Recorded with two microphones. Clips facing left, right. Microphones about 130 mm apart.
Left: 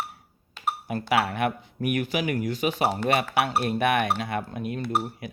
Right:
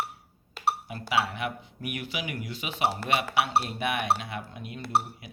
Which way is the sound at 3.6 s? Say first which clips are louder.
Left 5 dB; 55° left (ahead or behind).